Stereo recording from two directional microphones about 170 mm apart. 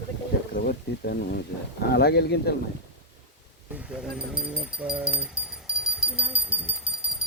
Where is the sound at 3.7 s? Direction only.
5° right (ahead or behind).